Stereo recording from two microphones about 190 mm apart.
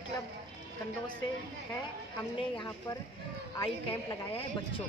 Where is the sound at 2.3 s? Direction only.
25° left (ahead or behind).